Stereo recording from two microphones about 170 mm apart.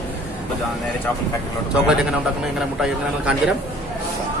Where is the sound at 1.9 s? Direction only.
5° right (ahead or behind).